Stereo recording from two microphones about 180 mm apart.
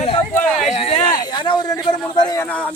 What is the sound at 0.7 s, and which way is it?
Speech, 35° left (ahead or behind).